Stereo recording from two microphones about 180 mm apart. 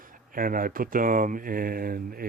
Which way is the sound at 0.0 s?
50° right (ahead or behind).